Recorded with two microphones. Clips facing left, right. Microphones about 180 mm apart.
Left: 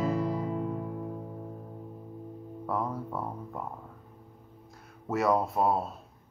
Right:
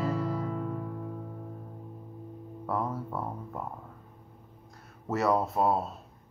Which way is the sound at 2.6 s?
Centre (ahead or behind).